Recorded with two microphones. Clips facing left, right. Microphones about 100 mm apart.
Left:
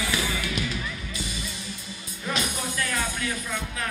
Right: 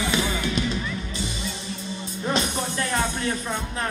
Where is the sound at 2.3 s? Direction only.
30° right (ahead or behind).